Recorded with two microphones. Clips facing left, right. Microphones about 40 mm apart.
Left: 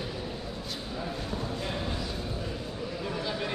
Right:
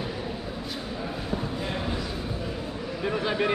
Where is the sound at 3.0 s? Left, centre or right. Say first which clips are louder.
Right 8 dB; right.